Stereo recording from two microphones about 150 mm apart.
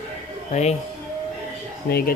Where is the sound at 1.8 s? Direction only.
90° left.